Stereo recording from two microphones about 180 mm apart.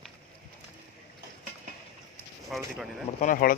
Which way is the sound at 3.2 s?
50° left (ahead or behind).